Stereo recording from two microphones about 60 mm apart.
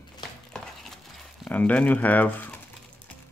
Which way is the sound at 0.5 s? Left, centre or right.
Centre.